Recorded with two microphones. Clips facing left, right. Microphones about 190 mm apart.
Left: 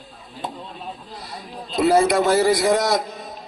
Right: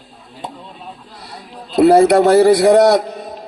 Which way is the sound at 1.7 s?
65° right (ahead or behind).